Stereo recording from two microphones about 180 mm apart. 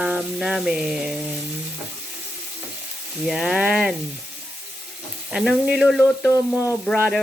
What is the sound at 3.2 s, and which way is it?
Speech, 5° right (ahead or behind).